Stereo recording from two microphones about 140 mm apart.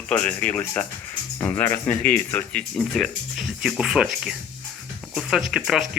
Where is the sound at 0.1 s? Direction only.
10° left (ahead or behind).